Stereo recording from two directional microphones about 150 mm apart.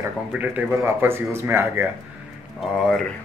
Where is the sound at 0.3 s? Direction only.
10° right (ahead or behind).